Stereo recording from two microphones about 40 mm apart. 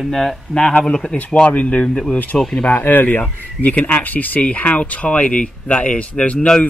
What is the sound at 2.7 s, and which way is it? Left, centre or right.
Speech, left.